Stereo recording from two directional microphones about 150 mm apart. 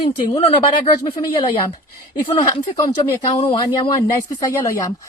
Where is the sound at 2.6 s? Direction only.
25° left (ahead or behind).